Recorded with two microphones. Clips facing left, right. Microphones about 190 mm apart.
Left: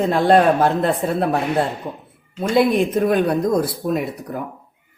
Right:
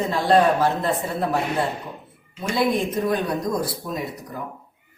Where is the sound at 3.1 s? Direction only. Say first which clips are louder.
Left 6 dB; 60° left (ahead or behind).